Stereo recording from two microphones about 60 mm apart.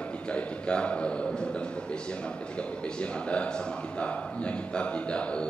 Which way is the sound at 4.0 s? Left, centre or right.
Centre.